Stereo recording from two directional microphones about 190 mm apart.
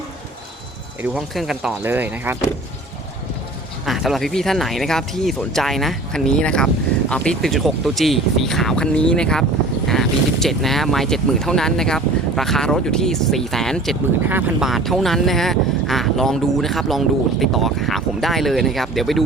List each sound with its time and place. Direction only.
1.0 s speech: centre (ahead or behind)
3.8 s speech: centre (ahead or behind)
14.3 s speech: 10° right (ahead or behind)